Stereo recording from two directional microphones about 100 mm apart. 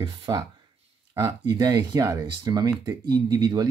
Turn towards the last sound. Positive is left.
turn(degrees=-40)  # may be behind; listen again after turning